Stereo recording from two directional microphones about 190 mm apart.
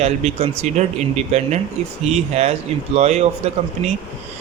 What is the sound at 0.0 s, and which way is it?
Speech, 35° right (ahead or behind).